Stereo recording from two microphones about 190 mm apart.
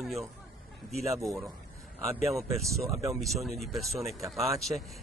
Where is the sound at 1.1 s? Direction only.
15° right (ahead or behind).